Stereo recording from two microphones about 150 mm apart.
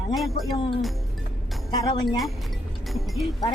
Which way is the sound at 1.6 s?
30° left (ahead or behind).